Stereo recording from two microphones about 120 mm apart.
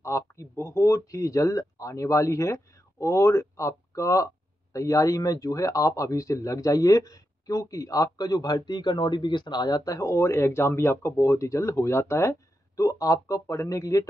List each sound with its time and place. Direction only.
0.0 s speech: 25° left (ahead or behind)